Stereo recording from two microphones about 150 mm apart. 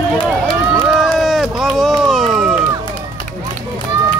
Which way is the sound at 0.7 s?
5° right (ahead or behind).